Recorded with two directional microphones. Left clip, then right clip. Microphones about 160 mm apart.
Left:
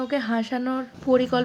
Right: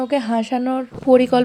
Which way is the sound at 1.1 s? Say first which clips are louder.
Right 7 dB; 35° right (ahead or behind).